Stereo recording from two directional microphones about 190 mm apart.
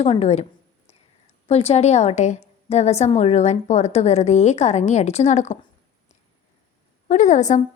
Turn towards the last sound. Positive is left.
turn(degrees=40)  # may be behind; listen again after turning